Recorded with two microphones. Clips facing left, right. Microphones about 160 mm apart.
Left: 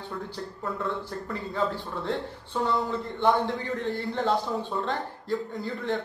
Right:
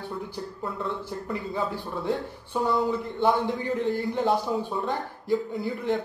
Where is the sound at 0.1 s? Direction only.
15° right (ahead or behind).